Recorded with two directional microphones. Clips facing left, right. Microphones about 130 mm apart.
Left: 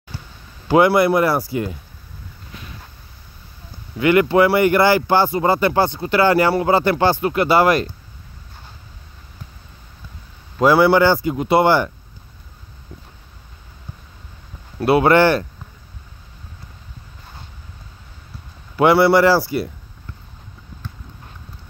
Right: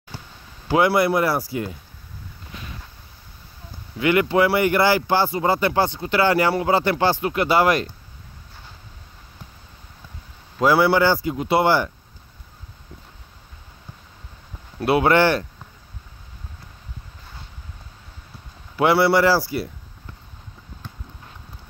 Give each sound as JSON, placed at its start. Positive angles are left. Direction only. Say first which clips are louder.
{"t": 0.7, "sound": "speech", "louder": "left 4 dB", "side_deg": 50}
{"t": 4.0, "sound": "speech", "louder": "left 4 dB", "side_deg": 50}
{"t": 10.6, "sound": "speech", "louder": "left 4 dB", "side_deg": 60}
{"t": 14.8, "sound": "speech", "louder": "left 3 dB", "side_deg": 40}
{"t": 18.8, "sound": "speech", "louder": "left 4 dB", "side_deg": 50}